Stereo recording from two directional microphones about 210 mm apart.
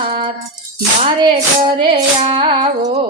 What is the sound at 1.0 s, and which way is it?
Female singing, 25° right (ahead or behind).